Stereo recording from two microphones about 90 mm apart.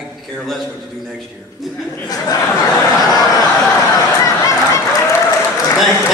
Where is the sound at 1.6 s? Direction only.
Centre (ahead or behind).